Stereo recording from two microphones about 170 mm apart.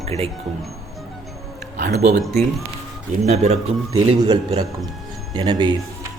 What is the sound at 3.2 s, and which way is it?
Speech, 40° right (ahead or behind).